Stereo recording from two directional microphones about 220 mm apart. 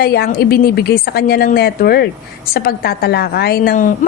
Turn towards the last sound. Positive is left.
turn(degrees=35)  # may be behind; listen again after turning